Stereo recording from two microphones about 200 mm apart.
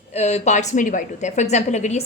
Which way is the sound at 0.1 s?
35° left (ahead or behind).